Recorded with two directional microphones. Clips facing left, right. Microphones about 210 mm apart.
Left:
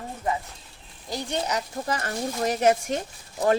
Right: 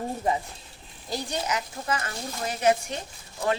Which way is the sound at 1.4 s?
35° left (ahead or behind).